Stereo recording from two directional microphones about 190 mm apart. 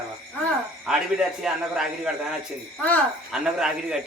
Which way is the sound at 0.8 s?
5° right (ahead or behind).